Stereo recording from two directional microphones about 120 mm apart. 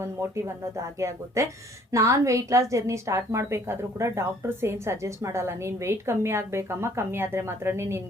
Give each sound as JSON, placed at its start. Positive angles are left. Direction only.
{"t": 0.0, "sound": "a woman's voice", "side_deg": -25}